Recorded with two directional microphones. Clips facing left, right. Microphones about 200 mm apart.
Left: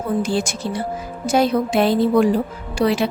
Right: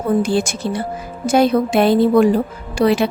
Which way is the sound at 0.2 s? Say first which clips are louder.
Right 3 dB; 55° right (ahead or behind).